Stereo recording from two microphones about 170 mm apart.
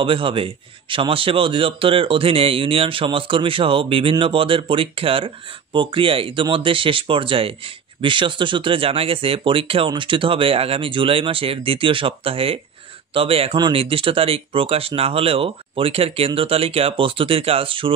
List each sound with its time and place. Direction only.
0.0 s speech: 30° right (ahead or behind)